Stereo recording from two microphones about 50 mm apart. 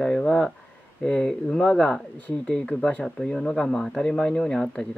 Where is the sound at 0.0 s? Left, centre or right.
Centre.